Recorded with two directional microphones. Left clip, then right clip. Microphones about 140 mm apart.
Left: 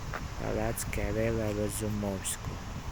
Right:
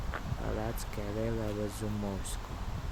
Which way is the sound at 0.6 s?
20° left (ahead or behind).